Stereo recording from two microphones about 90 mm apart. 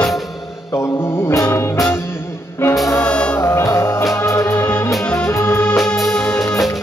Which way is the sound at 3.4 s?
30° left (ahead or behind).